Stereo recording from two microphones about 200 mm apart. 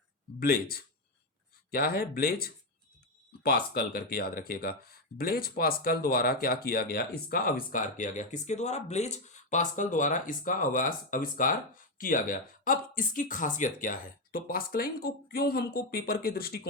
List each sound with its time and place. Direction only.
0.3 s speech: 50° left (ahead or behind)